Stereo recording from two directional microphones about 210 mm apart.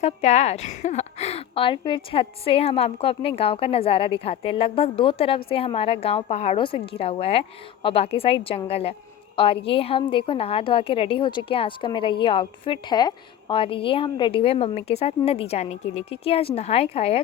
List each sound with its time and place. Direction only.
0.0 s a woman's voice: 35° left (ahead or behind)